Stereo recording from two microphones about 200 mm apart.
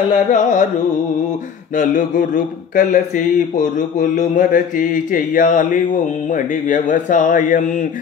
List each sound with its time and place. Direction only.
0.3 s speech: 40° left (ahead or behind)
1.8 s speech: 40° left (ahead or behind)